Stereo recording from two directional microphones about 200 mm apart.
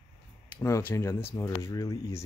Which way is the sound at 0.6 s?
15° left (ahead or behind).